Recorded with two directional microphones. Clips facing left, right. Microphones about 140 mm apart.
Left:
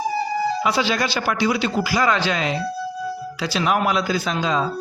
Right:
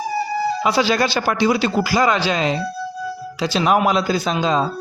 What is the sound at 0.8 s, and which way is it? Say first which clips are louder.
Speech: right 4 dB; 35° right (ahead or behind).